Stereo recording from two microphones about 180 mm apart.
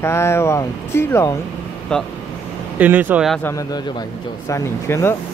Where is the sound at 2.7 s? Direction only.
10° right (ahead or behind).